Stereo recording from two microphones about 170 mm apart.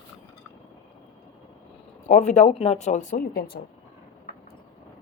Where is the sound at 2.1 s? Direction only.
45° left (ahead or behind); by 3.5 s 60° left (ahead or behind).